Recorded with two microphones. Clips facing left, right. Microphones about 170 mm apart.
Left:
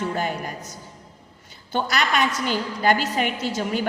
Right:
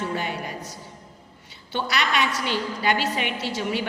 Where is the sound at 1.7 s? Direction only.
45° left (ahead or behind).